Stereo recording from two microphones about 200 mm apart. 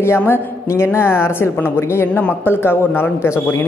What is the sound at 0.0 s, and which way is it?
Speech, 10° left (ahead or behind).